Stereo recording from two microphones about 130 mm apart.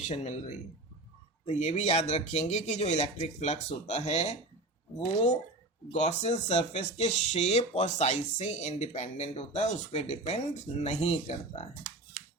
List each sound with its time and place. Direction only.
0.1 s speech: 60° left (ahead or behind)
5.9 s speech: 65° left (ahead or behind)